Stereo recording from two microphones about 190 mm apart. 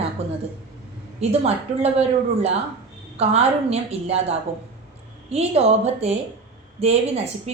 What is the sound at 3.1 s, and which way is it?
Speech, 35° right (ahead or behind).